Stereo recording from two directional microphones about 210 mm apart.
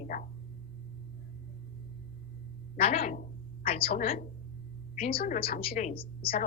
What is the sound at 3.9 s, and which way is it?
A woman's voice, 40° left (ahead or behind).